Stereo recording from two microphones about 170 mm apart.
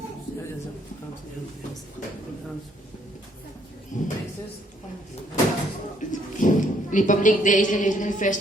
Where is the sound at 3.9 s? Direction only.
50° left (ahead or behind).